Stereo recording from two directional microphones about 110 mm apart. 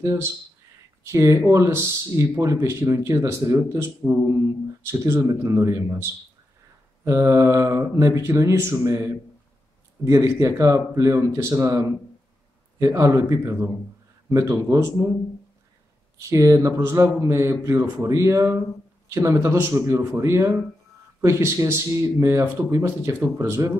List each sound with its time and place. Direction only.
0.0 s speech: 25° right (ahead or behind)
7.1 s speech: 30° right (ahead or behind)
14.7 s speech: 30° right (ahead or behind)
16.2 s speech: 30° right (ahead or behind)